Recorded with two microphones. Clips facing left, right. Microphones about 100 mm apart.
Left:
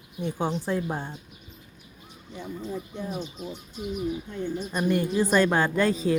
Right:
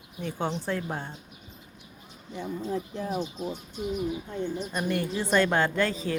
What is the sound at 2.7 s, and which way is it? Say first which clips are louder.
Speech: right 3 dB; 90° right.